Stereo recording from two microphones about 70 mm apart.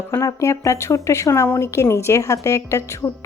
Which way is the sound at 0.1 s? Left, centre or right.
Left.